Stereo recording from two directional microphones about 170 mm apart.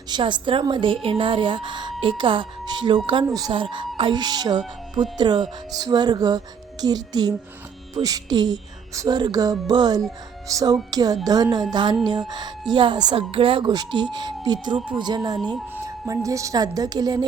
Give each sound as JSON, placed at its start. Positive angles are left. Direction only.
{"t": 0.1, "sound": "speech", "side_deg": -25}